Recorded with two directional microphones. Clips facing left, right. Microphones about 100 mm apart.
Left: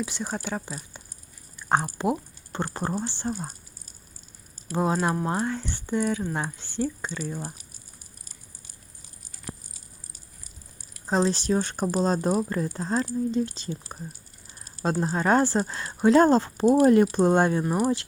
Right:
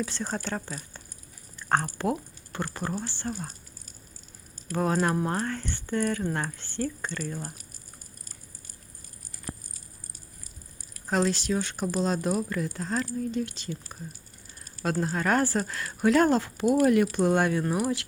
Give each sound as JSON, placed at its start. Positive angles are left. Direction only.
{"t": 0.0, "sound": "speech", "side_deg": 10}
{"t": 1.5, "sound": "a sound", "side_deg": 15}
{"t": 3.0, "sound": "speech", "side_deg": 20}
{"t": 4.7, "sound": "speech", "side_deg": 20}
{"t": 11.0, "sound": "speech", "side_deg": 25}
{"t": 14.6, "sound": "a sound", "side_deg": 30}
{"t": 15.0, "sound": "speech", "side_deg": 25}